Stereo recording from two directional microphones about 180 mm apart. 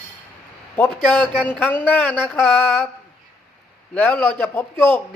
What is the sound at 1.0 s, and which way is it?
Speech, 10° left (ahead or behind).